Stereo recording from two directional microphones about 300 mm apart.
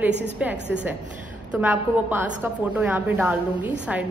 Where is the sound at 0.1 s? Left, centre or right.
Right.